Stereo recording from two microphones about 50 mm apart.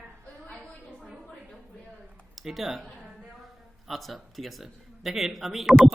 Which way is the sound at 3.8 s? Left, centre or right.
Centre.